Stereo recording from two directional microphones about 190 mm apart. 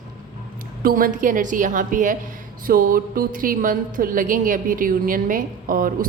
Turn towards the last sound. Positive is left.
turn(degrees=-45)  # may be behind; listen again after turning